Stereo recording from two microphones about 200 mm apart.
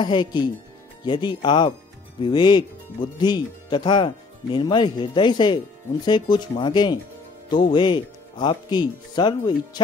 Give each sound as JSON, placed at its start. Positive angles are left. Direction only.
{"t": 0.0, "sound": "speech", "side_deg": 25}